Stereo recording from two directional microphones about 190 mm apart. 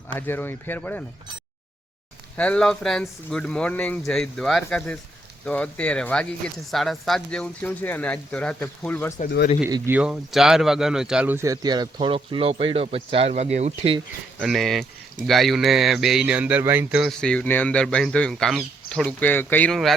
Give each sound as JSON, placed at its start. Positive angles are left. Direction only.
{"t": 0.1, "sound": "speech", "side_deg": 10}
{"t": 2.3, "sound": "speech", "side_deg": 5}
{"t": 9.6, "sound": "speech", "side_deg": -15}
{"t": 14.3, "sound": "speech", "side_deg": 0}